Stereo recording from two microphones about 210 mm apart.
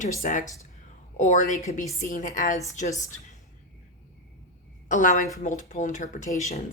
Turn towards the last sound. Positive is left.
turn(degrees=35)  # may be behind; listen again after turning